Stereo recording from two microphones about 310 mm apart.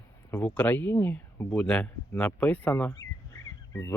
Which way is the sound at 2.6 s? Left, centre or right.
Centre.